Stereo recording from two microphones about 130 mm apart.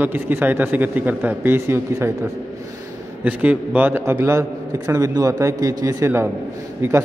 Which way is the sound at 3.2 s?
10° right (ahead or behind).